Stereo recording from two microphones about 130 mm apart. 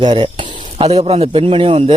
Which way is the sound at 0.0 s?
35° right (ahead or behind).